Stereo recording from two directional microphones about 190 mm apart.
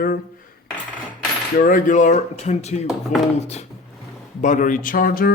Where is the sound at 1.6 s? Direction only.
45° left (ahead or behind).